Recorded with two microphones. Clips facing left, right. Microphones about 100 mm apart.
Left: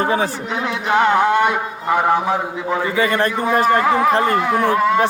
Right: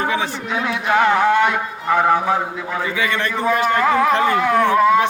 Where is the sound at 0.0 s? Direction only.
40° left (ahead or behind).